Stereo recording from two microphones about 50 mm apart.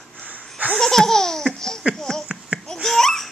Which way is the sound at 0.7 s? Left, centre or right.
Centre.